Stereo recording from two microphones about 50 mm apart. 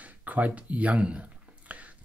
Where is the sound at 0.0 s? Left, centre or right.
Right.